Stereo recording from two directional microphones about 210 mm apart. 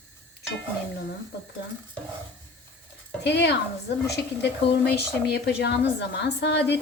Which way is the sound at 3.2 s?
55° left (ahead or behind).